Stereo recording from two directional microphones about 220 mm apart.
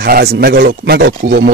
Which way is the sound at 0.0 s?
45° right (ahead or behind).